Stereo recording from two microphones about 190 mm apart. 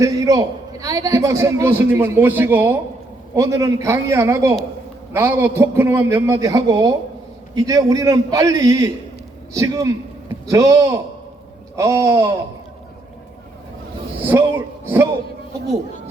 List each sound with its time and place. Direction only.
0.0 s a man's voice: 20° right (ahead or behind)
14.3 s a man's voice: 10° right (ahead or behind)